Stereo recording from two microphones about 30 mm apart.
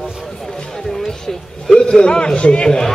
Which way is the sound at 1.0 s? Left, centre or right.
Left.